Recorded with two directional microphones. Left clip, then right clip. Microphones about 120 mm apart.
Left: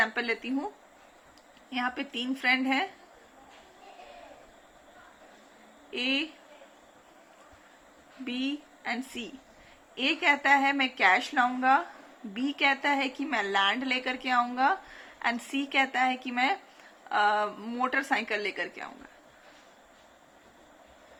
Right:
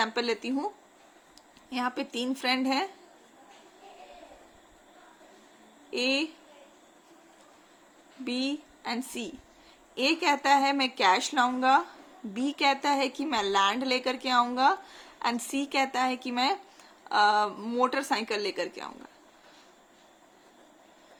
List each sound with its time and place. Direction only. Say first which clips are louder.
0.0 s a woman's voice: even; 70° right (ahead or behind)
1.7 s a woman's voice: even; 70° right (ahead or behind)
5.9 s a woman's voice: right 2 dB; 75° right (ahead or behind)
8.2 s a woman's voice: right 2 dB; 80° right